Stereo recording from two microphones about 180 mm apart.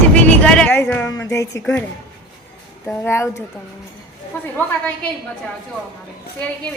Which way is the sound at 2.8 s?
10° left (ahead or behind).